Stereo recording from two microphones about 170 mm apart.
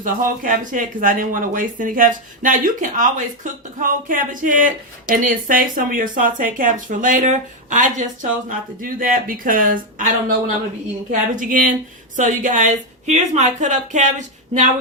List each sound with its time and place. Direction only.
0.0 s speech: 50° right (ahead or behind)